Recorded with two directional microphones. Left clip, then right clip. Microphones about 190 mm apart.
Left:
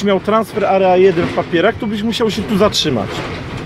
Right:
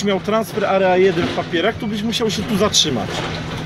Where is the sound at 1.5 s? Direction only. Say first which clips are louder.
Left 6 dB; 25° left (ahead or behind).